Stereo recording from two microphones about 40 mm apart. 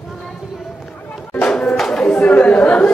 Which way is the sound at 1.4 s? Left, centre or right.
Left.